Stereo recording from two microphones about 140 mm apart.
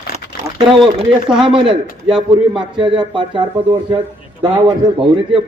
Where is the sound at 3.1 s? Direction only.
35° right (ahead or behind).